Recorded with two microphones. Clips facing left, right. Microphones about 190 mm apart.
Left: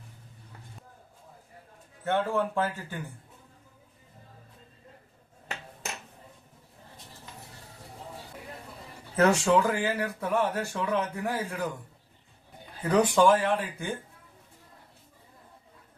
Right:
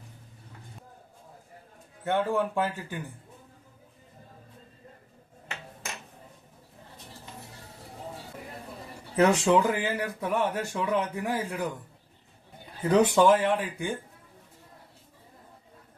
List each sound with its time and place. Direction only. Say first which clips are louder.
2.0 s speech: right 1 dB; 15° right (ahead or behind)
9.1 s speech: right 1 dB; 15° right (ahead or behind)
12.9 s speech: right 1 dB; 20° right (ahead or behind)